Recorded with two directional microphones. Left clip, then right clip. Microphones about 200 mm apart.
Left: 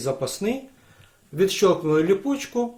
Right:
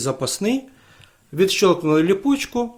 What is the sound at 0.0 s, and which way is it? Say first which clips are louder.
Speech: right 3 dB; 45° right (ahead or behind).